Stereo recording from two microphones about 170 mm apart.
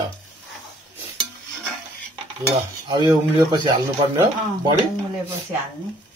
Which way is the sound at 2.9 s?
25° right (ahead or behind).